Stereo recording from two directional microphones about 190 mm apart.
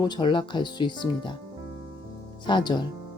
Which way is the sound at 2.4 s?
25° left (ahead or behind).